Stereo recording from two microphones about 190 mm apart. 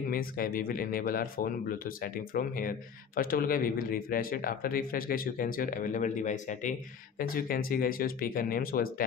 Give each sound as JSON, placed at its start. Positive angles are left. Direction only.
{"t": 0.1, "sound": "a man's voice", "side_deg": 50}